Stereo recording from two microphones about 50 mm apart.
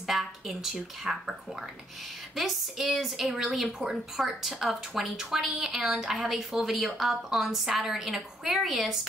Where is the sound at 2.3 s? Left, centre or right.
Centre.